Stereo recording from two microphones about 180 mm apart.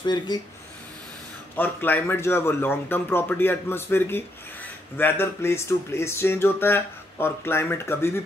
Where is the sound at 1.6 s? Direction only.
10° left (ahead or behind).